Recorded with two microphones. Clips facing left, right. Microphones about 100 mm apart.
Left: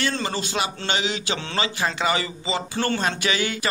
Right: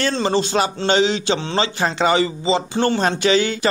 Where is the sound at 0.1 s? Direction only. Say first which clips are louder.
Right 8 dB; 30° right (ahead or behind).